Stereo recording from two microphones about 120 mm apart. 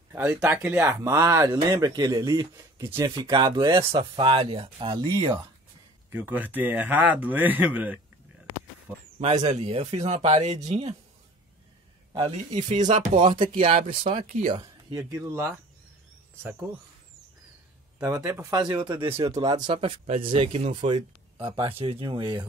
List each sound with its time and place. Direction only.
0.1 s speech: 15° right (ahead or behind)
0.8 s speech: 30° right (ahead or behind)
3.7 s speech: 45° right (ahead or behind)
6.1 s speech: 15° right (ahead or behind)
9.4 s speech: 65° right (ahead or behind)
12.1 s speech: 50° right (ahead or behind)
12.5 s speech: 85° right
13.4 s speech: 50° right (ahead or behind)
14.6 s speech: 30° right (ahead or behind)
17.9 s speech: 30° right (ahead or behind)
18.5 s speech: 35° right (ahead or behind)